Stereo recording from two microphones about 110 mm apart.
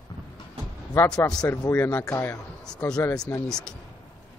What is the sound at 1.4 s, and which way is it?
A man's voice, 25° left (ahead or behind).